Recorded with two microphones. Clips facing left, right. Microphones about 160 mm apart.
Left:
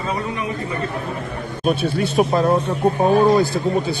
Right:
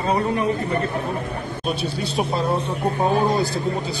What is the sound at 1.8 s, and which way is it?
Speech, 50° left (ahead or behind).